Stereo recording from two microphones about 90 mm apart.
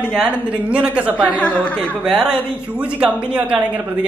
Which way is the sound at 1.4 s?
15° left (ahead or behind).